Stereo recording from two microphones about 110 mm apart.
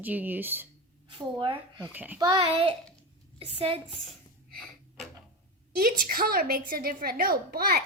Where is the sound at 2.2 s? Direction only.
45° right (ahead or behind).